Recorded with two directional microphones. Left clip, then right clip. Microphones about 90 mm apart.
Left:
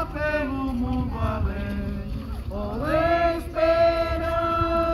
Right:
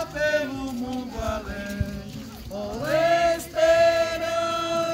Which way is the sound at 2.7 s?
45° right (ahead or behind).